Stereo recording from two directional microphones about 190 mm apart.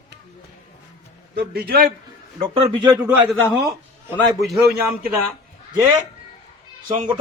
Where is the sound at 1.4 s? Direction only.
55° right (ahead or behind).